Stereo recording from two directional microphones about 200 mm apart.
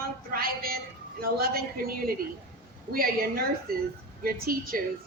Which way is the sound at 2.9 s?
50° right (ahead or behind).